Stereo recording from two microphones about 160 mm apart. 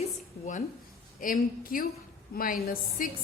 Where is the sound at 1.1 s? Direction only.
60° left (ahead or behind).